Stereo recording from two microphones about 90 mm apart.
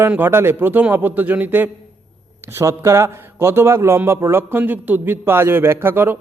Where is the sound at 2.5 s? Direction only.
35° right (ahead or behind).